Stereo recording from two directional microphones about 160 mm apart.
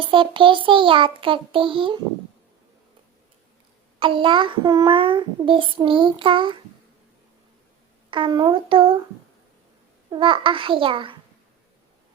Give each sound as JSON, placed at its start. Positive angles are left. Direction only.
{"t": 0.1, "sound": "child singing", "side_deg": -30}
{"t": 4.0, "sound": "child singing", "side_deg": -30}
{"t": 8.1, "sound": "child singing", "side_deg": -30}
{"t": 10.1, "sound": "child singing", "side_deg": -30}